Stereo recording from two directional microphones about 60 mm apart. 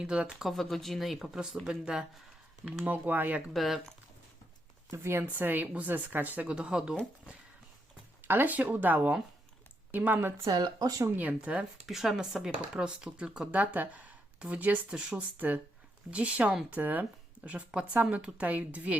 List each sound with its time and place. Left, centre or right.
0.0 s speech: centre
0.4 s speech: centre
2.6 s speech: right
3.5 s speech: centre
5.2 s a woman's voice: right
8.3 s a woman's voice: right
10.2 s a woman's voice: right
10.4 s speech: right
11.1 s speech: right
11.9 s speech: centre
13.5 s speech: right